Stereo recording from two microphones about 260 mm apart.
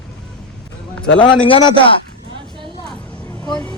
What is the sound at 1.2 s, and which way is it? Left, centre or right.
Speech, centre.